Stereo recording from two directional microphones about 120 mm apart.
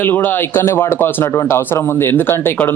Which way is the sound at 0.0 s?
15° left (ahead or behind).